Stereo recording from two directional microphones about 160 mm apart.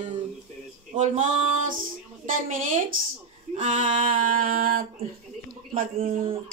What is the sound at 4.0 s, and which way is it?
Speech, 60° right (ahead or behind).